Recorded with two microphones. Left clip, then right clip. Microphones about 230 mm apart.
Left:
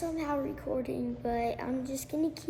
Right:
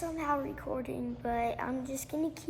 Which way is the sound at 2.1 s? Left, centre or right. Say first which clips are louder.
Left 2 dB; right.